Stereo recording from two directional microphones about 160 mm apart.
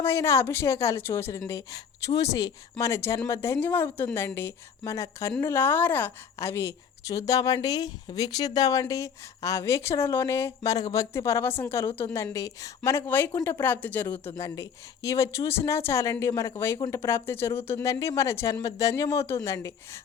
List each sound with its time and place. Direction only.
0.0 s a woman's voice: 15° left (ahead or behind)